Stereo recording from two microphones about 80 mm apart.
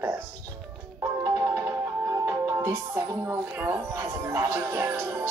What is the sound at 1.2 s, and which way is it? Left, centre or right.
Speech, right.